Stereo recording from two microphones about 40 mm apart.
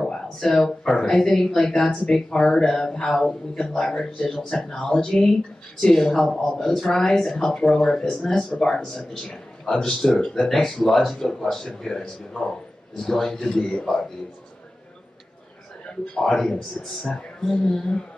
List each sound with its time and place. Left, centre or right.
0.0 s speech: centre
12.4 s a man's voice: left
13.0 s speech: centre
16.2 s speech: centre
16.8 s speech: left
17.4 s speech: centre